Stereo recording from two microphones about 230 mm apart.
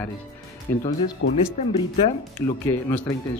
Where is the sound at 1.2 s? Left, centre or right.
Left.